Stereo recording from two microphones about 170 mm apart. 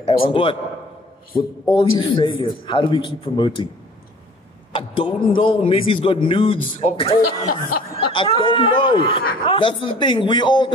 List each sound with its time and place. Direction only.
0.0 s speech: 35° left (ahead or behind)
4.7 s speech: 30° left (ahead or behind)